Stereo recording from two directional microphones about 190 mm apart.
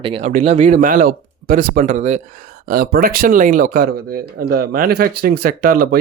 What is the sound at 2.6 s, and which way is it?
Speech, 55° right (ahead or behind).